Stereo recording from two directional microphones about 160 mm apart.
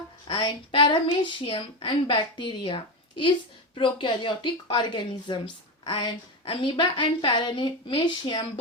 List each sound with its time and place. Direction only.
0.3 s a woman's voice: 30° left (ahead or behind)